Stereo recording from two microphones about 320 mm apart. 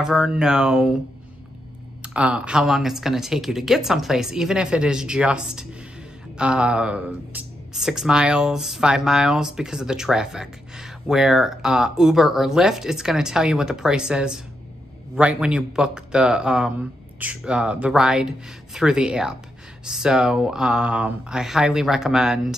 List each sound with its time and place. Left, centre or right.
0.0 s speech: centre
2.0 s speech: centre